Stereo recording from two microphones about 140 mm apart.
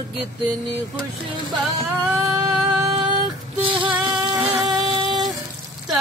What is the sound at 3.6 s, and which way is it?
Music, 35° right (ahead or behind).